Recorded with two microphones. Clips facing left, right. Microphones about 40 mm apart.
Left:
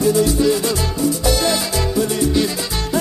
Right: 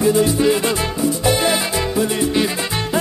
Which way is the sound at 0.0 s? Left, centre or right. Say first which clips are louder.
Even; right.